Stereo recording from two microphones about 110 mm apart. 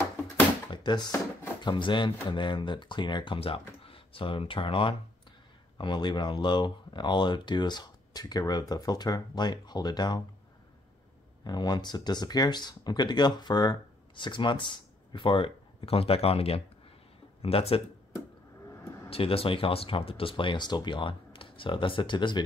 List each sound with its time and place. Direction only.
0.7 s a sound: 40° left (ahead or behind)
1.6 s speech: 45° left (ahead or behind)
3.3 s speech: 55° left (ahead or behind); by 10.2 s 40° left (ahead or behind)
11.4 s speech: 40° left (ahead or behind); by 17.8 s 60° left (ahead or behind)
19.0 s speech: 60° left (ahead or behind)